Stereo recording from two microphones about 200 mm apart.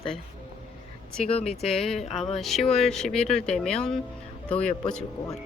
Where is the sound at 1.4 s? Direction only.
Centre (ahead or behind).